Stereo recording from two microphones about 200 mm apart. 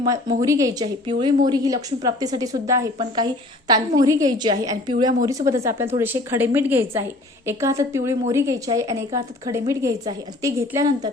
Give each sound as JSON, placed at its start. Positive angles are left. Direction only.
{"t": 0.0, "sound": "a woman's voice", "side_deg": -20}